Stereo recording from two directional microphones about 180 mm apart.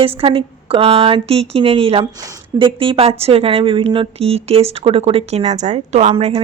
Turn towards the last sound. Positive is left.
turn(degrees=-35)  # may be behind; listen again after turning